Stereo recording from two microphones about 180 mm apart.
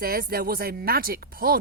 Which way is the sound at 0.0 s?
55° right (ahead or behind).